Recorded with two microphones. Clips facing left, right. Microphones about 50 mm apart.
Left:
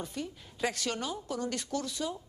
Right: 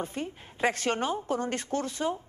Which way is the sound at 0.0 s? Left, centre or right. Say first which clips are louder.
Right 4 dB; right.